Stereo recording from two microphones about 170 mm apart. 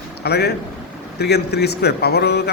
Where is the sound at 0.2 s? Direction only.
70° left (ahead or behind).